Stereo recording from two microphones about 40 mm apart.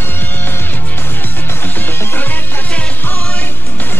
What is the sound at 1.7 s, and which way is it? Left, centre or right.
Music, left.